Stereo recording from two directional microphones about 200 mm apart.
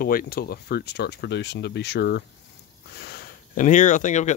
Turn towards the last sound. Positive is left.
turn(degrees=35)  # may be behind; listen again after turning